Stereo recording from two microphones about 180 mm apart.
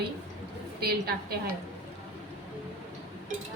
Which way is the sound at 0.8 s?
60° right (ahead or behind).